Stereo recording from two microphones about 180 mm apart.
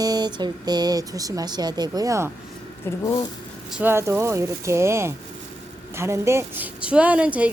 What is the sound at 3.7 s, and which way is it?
A woman's voice, 10° right (ahead or behind).